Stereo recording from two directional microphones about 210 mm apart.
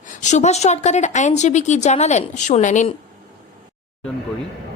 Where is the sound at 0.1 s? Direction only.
35° left (ahead or behind).